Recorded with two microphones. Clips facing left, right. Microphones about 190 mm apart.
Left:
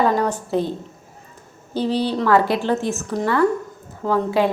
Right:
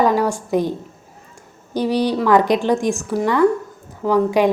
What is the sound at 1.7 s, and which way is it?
A woman's voice, 15° right (ahead or behind).